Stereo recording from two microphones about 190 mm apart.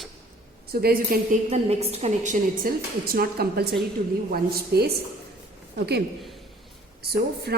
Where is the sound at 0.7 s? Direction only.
50° right (ahead or behind).